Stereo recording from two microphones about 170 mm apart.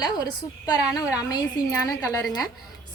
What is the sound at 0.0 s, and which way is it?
A woman's voice, 25° left (ahead or behind).